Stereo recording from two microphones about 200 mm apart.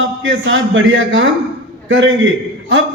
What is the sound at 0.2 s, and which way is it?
A man's voice, 70° right (ahead or behind).